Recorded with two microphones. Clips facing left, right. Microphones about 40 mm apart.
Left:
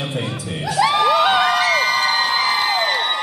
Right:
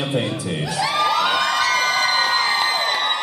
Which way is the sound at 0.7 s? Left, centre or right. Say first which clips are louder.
Left 5 dB; centre.